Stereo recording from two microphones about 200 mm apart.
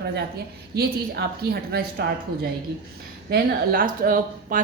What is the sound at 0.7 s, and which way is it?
Speech, 50° right (ahead or behind).